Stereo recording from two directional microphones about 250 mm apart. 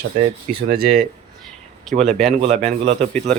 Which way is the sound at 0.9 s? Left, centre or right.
Centre.